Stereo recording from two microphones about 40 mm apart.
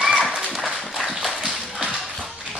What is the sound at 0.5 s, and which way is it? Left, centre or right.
Dog, centre.